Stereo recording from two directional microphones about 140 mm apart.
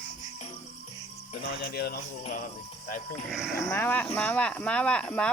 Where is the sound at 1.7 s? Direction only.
90° left.